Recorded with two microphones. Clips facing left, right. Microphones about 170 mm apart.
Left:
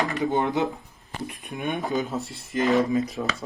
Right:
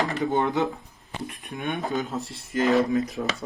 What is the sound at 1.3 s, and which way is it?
Speech, centre (ahead or behind).